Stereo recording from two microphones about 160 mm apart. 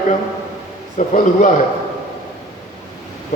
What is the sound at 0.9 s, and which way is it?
Speech, 50° left (ahead or behind).